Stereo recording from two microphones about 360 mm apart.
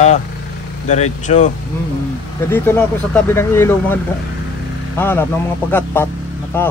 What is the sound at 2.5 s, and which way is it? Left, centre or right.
Speech, centre.